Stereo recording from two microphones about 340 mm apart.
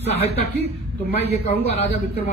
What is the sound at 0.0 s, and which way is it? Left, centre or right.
A woman's voice, centre.